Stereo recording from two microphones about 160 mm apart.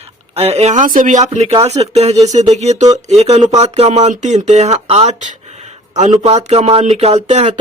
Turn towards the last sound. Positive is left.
turn(degrees=-45)  # may be behind; listen again after turning